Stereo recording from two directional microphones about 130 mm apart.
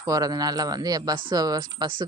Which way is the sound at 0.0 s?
30° right (ahead or behind).